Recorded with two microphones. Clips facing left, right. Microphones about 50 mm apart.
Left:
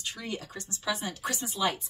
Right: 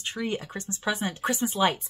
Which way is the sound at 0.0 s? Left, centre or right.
Right.